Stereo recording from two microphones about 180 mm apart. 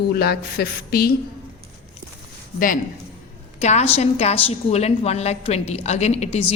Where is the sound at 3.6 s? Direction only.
40° left (ahead or behind).